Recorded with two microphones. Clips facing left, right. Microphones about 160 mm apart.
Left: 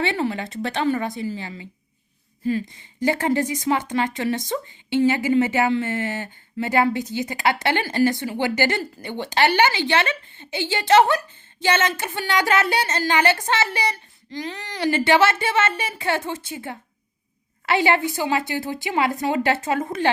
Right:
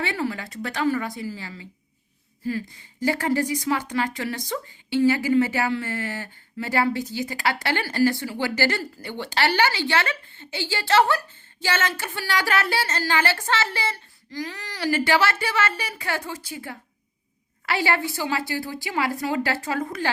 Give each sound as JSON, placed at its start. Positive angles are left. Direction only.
{"t": 0.0, "sound": "a woman's voice", "side_deg": 25}